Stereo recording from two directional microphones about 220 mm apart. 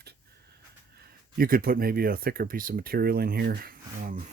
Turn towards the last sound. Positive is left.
turn(degrees=-40)  # may be behind; listen again after turning